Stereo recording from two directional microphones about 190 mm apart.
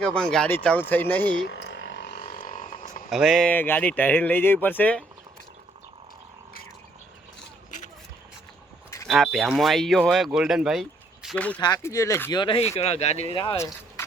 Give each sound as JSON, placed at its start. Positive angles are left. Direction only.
{"t": 0.0, "sound": "speech", "side_deg": 5}
{"t": 1.5, "sound": "a sound", "side_deg": 65}
{"t": 2.2, "sound": "a sound", "side_deg": 45}
{"t": 3.1, "sound": "speech", "side_deg": 0}
{"t": 9.0, "sound": "speech", "side_deg": 0}
{"t": 11.6, "sound": "speech", "side_deg": 20}
{"t": 13.3, "sound": "speech", "side_deg": 25}